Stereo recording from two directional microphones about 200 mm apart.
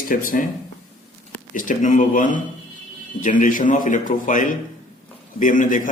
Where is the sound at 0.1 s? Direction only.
45° left (ahead or behind).